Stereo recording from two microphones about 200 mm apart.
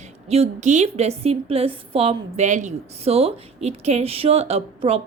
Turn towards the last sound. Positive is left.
turn(degrees=-30)  # may be behind; listen again after turning